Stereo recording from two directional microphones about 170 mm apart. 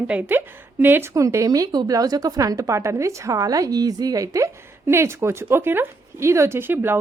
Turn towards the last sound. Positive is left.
turn(degrees=-10)  # may be behind; listen again after turning